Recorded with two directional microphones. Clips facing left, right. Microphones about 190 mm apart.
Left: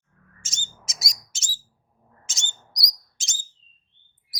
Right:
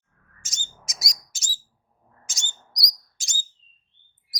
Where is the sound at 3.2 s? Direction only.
25° left (ahead or behind).